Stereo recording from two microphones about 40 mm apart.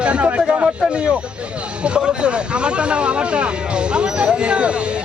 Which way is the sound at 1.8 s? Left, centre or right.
Right.